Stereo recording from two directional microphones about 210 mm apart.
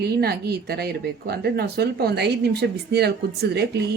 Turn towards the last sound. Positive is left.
turn(degrees=-50)  # may be behind; listen again after turning